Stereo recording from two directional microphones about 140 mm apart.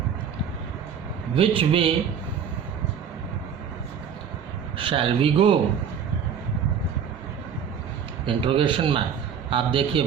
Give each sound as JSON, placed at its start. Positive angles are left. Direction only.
{"t": 1.4, "sound": "speech", "side_deg": -40}
{"t": 4.8, "sound": "speech", "side_deg": -40}
{"t": 8.3, "sound": "speech", "side_deg": -40}